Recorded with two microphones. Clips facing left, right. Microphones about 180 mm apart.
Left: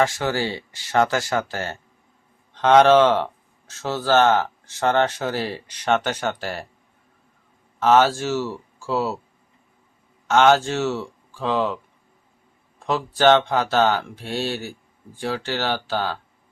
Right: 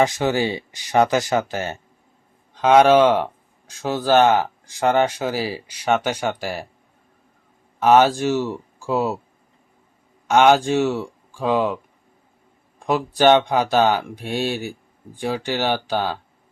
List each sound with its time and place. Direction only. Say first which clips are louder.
0.0 s speech: right 3 dB; 20° right (ahead or behind)
7.8 s speech: right 2 dB; 15° right (ahead or behind)
10.2 s speech: right 2 dB; 15° right (ahead or behind)
12.8 s speech: right 2 dB; 15° right (ahead or behind)